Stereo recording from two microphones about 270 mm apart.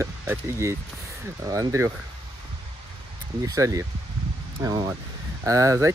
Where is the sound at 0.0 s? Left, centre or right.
Centre.